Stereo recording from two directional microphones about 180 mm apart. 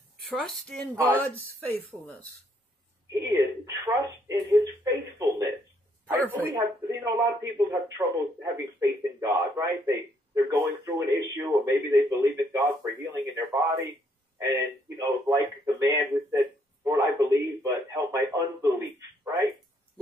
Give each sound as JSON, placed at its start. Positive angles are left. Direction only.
{"t": 0.4, "sound": "speech", "side_deg": 0}
{"t": 3.1, "sound": "telephone", "side_deg": -20}
{"t": 6.0, "sound": "speech", "side_deg": -15}